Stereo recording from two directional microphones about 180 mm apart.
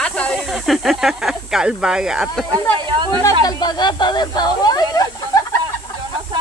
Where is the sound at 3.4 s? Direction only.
25° left (ahead or behind).